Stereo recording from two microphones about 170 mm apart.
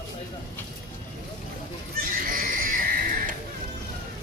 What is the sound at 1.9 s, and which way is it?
Neigh, 55° right (ahead or behind).